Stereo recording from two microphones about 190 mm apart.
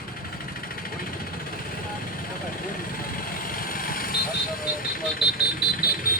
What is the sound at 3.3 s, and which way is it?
Vehicle, 50° left (ahead or behind).